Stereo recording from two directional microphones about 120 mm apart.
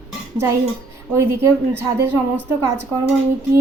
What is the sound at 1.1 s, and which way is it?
A woman's voice, 20° right (ahead or behind).